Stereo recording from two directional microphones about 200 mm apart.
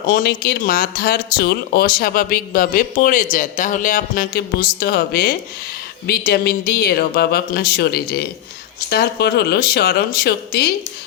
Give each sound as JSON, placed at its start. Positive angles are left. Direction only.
{"t": 0.1, "sound": "speech", "side_deg": 50}